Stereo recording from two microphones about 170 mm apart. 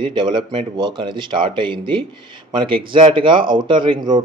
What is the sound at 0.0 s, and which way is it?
Speech, 25° right (ahead or behind).